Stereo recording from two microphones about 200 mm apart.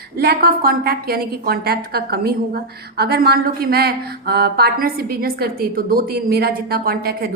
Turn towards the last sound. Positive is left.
turn(degrees=-50)  # may be behind; listen again after turning